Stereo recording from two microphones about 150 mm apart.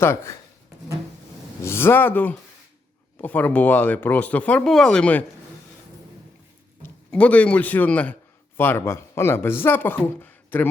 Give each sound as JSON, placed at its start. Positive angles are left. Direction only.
{"t": 0.0, "sound": "speech", "side_deg": 15}
{"t": 1.6, "sound": "speech", "side_deg": 15}
{"t": 7.1, "sound": "speech", "side_deg": 10}